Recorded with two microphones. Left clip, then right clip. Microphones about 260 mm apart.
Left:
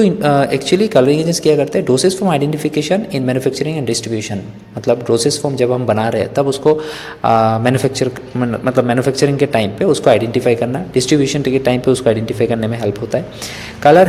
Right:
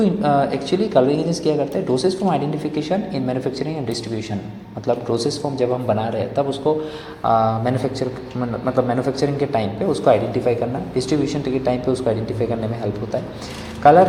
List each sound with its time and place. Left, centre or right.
0.0 s a man's voice: left
5.0 s a man's voice: left